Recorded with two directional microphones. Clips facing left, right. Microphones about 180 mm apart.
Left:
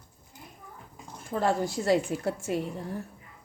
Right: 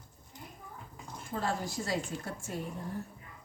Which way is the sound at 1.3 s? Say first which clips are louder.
Left 8 dB; 65° left (ahead or behind).